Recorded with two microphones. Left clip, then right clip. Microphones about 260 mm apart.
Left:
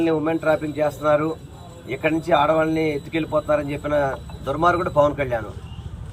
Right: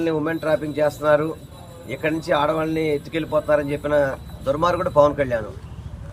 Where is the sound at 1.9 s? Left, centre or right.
Centre.